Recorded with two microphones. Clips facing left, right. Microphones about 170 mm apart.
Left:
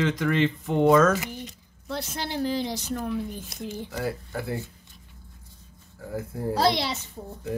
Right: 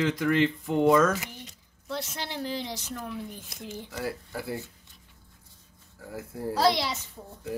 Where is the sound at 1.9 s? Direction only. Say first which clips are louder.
Left 5 dB; 35° left (ahead or behind).